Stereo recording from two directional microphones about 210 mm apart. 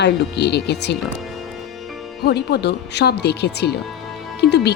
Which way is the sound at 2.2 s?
50° left (ahead or behind).